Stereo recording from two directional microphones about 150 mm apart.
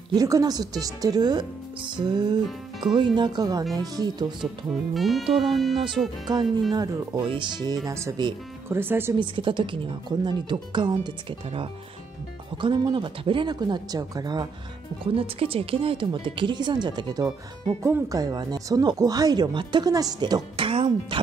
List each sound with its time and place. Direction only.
0.1 s speech: 25° right (ahead or behind)
4.9 s speech: centre (ahead or behind)
6.3 s speech: 25° right (ahead or behind)
9.2 s speech: 35° right (ahead or behind)
15.1 s speech: 40° right (ahead or behind)